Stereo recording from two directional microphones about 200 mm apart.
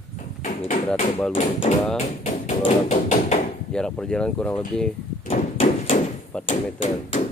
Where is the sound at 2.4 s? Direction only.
35° left (ahead or behind).